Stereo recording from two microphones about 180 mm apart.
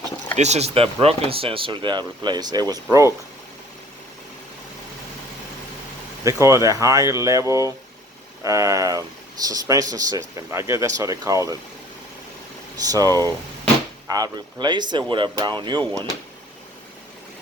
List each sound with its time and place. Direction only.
0.3 s speech: 40° right (ahead or behind); by 2.8 s 20° right (ahead or behind)
6.2 s speech: 15° right (ahead or behind)
12.9 s speech: 20° right (ahead or behind)